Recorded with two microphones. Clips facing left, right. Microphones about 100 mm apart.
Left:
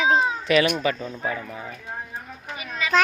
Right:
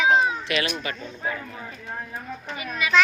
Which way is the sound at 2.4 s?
20° left (ahead or behind).